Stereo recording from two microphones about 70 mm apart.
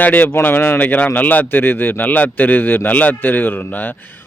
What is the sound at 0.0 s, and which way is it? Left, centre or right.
Speech, left.